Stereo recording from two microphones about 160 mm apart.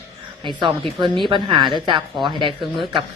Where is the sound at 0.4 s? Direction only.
30° right (ahead or behind).